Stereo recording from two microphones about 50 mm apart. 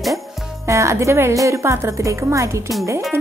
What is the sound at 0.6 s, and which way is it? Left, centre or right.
A woman's voice, right.